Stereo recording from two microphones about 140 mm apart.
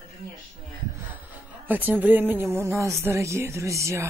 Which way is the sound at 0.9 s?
10° right (ahead or behind).